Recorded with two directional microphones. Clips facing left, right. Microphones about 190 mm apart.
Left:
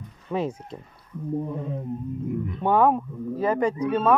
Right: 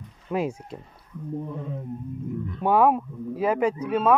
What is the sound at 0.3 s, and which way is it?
Speech, 10° right (ahead or behind).